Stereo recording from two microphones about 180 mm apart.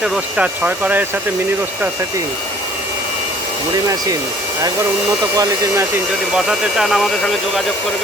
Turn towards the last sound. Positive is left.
turn(degrees=0)  # may be behind; listen again after turning